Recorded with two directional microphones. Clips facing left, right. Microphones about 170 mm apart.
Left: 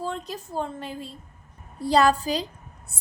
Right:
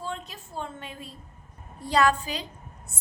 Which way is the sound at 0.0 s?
40° left (ahead or behind).